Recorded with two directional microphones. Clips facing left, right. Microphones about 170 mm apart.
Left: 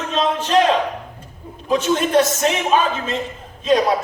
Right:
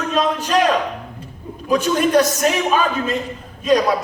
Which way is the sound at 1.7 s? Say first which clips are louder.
Right 1 dB; 25° left (ahead or behind).